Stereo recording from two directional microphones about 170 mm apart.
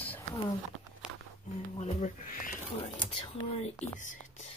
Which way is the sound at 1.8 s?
45° left (ahead or behind).